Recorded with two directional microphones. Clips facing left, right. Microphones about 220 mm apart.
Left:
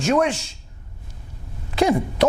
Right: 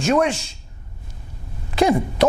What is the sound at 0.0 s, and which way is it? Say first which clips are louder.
Speech: right 1 dB; 15° right (ahead or behind).